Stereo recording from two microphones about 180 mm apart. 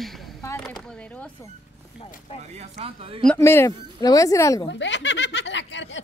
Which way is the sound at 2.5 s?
35° right (ahead or behind).